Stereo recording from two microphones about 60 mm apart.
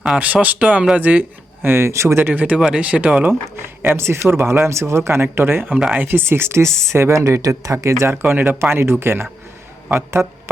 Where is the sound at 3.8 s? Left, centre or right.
Right.